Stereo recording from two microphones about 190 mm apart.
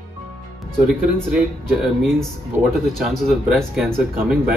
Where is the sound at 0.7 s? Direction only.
5° right (ahead or behind).